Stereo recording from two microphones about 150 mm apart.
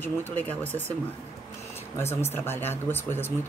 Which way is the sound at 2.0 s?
15° left (ahead or behind).